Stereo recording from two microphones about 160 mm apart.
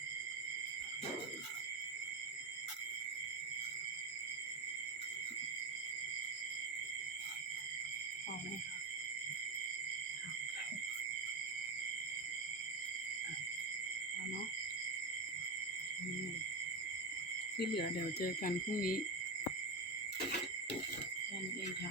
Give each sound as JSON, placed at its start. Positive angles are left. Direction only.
{"t": 17.6, "sound": "speech", "side_deg": 90}